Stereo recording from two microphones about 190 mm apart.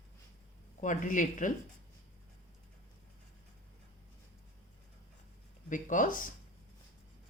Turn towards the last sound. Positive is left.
turn(degrees=45)  # may be behind; listen again after turning